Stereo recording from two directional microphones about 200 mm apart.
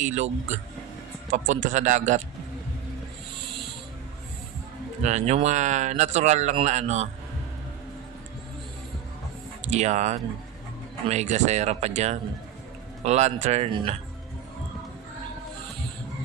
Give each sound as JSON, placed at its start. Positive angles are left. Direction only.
{"t": 0.0, "sound": "a man's voice", "side_deg": -35}
{"t": 5.0, "sound": "a man's voice", "side_deg": -35}
{"t": 9.7, "sound": "a man's voice", "side_deg": -35}